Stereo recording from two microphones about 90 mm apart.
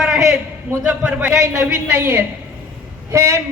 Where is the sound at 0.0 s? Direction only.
5° right (ahead or behind).